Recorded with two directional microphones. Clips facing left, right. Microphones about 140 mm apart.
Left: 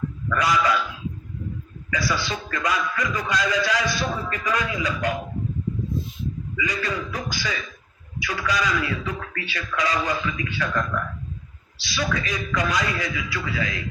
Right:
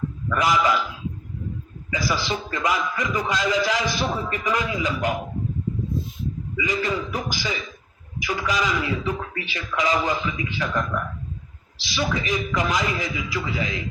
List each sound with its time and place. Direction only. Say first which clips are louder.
0.3 s a man's voice: right 1 dB; 25° right (ahead or behind)
1.9 s a man's voice: right 1 dB; 25° right (ahead or behind)
6.6 s a man's voice: right 3 dB; 25° right (ahead or behind)